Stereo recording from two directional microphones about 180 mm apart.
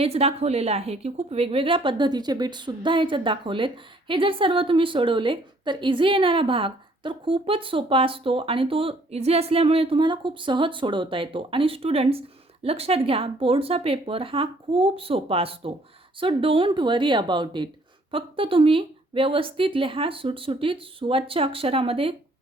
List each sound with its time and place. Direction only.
0.0 s a woman's voice: 35° right (ahead or behind)